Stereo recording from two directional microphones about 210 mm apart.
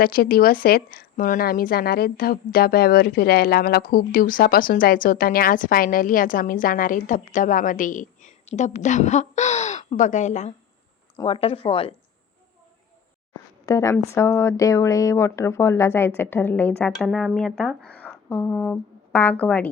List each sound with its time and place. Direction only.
0.0 s a woman's voice: 45° left (ahead or behind); by 11.9 s 25° left (ahead or behind)
13.7 s speech: 15° left (ahead or behind)